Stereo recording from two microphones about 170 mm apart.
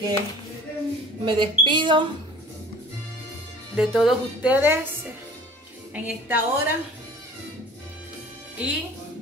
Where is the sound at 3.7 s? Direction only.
5° right (ahead or behind).